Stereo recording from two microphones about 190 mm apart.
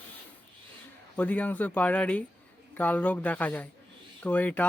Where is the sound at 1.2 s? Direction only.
10° left (ahead or behind).